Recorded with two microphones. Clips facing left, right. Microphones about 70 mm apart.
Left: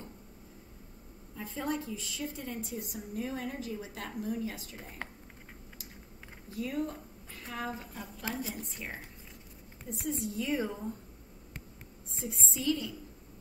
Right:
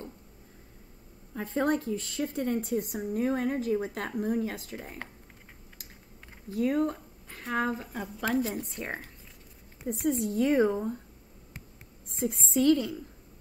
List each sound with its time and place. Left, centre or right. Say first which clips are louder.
1.3 s a woman's voice: right 8 dB; right
6.5 s a woman's voice: right 8 dB; right
8.4 s a woman's voice: right 9 dB; centre
9.9 s a woman's voice: right 8 dB; right
12.1 s a woman's voice: right 9 dB; right